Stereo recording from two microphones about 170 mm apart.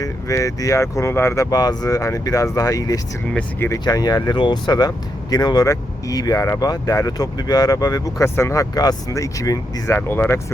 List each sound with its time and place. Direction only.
0.0 s speech: 20° left (ahead or behind)